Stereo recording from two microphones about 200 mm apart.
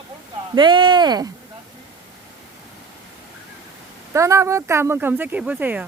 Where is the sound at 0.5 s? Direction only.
25° right (ahead or behind).